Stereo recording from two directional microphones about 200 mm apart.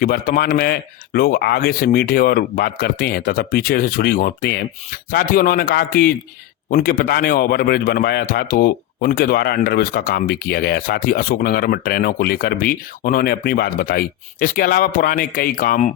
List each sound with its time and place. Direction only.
0.0 s a man's voice: 45° left (ahead or behind)